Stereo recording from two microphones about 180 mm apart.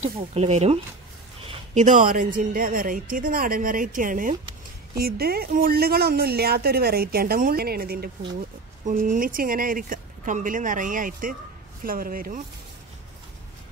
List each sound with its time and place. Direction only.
0.0 s a woman's voice: 35° right (ahead or behind)
4.9 s speech: 60° right (ahead or behind)
8.8 s a woman's voice: 45° right (ahead or behind)